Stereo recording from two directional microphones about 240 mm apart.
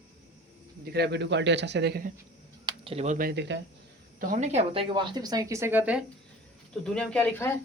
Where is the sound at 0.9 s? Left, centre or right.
Right.